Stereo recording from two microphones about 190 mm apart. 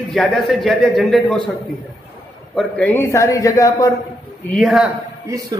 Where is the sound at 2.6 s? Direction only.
5° left (ahead or behind).